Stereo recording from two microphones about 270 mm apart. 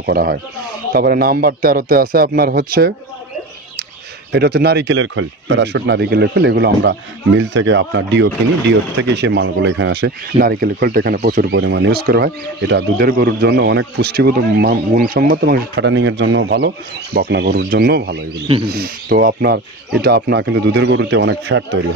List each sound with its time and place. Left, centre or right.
0.0 s speech: right
4.3 s speech: right